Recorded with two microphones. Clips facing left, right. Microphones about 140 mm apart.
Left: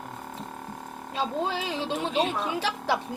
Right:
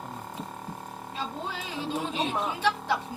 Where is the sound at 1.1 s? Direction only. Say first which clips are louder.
Left 7 dB; 90° left.